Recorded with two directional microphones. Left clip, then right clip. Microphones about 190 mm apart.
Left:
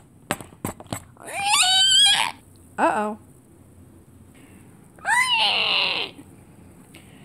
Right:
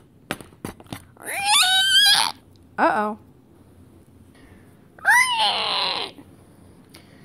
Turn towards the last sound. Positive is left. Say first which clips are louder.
# left 2 dB
turn(degrees=-15)  # may be behind; listen again after turning